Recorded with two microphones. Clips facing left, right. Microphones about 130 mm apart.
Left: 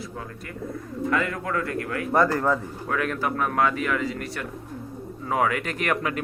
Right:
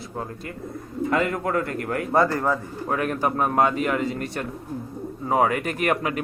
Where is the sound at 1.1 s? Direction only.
35° right (ahead or behind).